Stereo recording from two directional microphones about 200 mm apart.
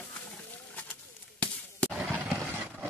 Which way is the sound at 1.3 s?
5° left (ahead or behind).